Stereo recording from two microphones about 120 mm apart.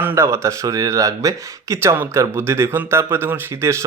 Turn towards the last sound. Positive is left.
turn(degrees=-25)  # may be behind; listen again after turning